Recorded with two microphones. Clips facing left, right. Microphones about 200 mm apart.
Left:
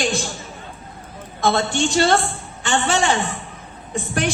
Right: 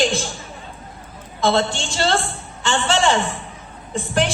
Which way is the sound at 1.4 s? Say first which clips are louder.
Even; 55° left (ahead or behind).